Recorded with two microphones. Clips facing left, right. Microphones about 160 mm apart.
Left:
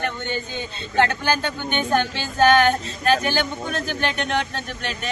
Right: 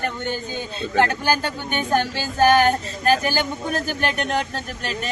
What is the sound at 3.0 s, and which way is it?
Speech, 40° right (ahead or behind).